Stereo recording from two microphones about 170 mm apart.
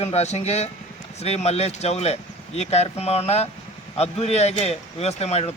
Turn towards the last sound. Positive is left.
turn(degrees=40)  # may be behind; listen again after turning